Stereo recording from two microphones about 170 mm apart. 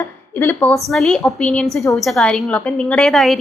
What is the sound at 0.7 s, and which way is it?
A woman's voice, centre (ahead or behind).